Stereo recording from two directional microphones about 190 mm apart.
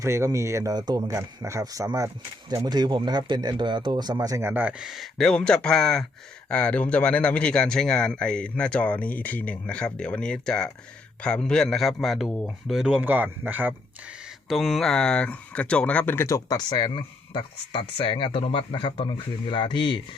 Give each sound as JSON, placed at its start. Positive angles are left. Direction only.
{"t": 0.0, "sound": "speech", "side_deg": -15}